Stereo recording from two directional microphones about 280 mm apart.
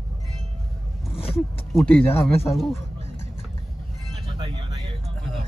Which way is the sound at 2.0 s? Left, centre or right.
Left.